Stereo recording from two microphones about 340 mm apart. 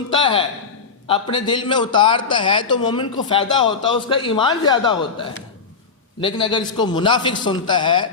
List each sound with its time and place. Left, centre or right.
0.1 s speech: centre